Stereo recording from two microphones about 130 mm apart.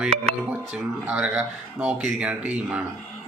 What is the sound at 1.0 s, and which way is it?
Speech, 10° right (ahead or behind).